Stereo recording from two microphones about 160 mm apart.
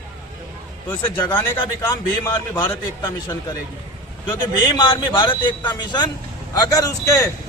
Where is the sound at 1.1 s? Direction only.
30° left (ahead or behind).